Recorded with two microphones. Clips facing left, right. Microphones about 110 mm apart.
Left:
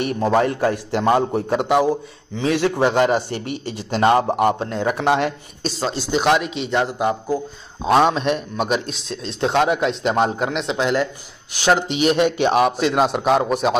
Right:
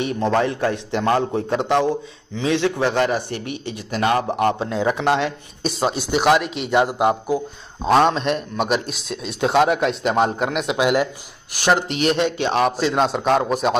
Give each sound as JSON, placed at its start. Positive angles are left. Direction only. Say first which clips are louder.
{"t": 0.1, "sound": "a man's voice", "louder": "left 3 dB", "side_deg": 5}
{"t": 4.6, "sound": "speech", "louder": "right 1 dB", "side_deg": 0}
{"t": 5.0, "sound": "a man's voice", "louder": "left 3 dB", "side_deg": 15}
{"t": 6.0, "sound": "speech", "louder": "even", "side_deg": -5}
{"t": 6.7, "sound": "a man's voice", "louder": "right 3 dB", "side_deg": -15}
{"t": 7.8, "sound": "speech", "louder": "even", "side_deg": 5}
{"t": 12.6, "sound": "speech", "louder": "left 1 dB", "side_deg": 0}